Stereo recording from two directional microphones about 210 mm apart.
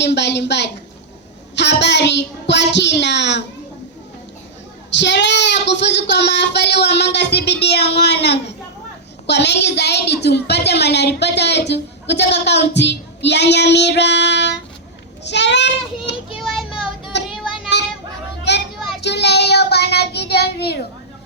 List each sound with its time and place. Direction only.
0.0 s a woman's voice: 55° left (ahead or behind)
4.9 s a woman's voice: 55° left (ahead or behind)
16.1 s child singing: 55° left (ahead or behind)
17.7 s children playing: 55° left (ahead or behind)
19.0 s child singing: 55° left (ahead or behind)